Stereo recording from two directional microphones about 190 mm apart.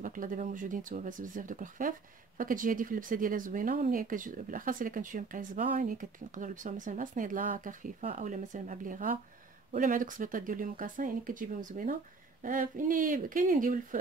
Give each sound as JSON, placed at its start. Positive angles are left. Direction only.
{"t": 0.0, "sound": "speech", "side_deg": -45}